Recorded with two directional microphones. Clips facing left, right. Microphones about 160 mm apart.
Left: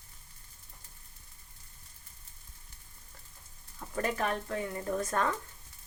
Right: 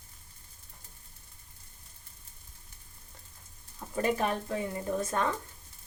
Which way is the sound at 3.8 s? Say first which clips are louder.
Right 3 dB; 20° right (ahead or behind).